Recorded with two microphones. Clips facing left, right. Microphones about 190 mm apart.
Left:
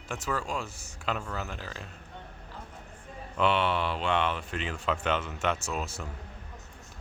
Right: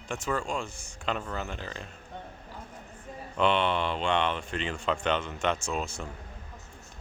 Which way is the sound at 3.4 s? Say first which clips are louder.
Right 1 dB; 5° left (ahead or behind).